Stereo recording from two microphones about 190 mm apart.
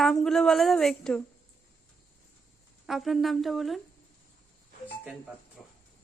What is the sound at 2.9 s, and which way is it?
Speech, centre (ahead or behind).